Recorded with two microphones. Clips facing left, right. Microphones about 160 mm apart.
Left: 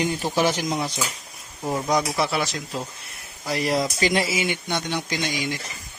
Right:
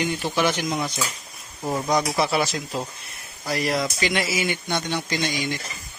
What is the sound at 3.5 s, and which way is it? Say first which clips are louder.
A man's voice: left 1 dB; 30° left (ahead or behind).